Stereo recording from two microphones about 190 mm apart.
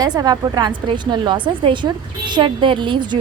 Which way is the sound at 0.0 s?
20° right (ahead or behind).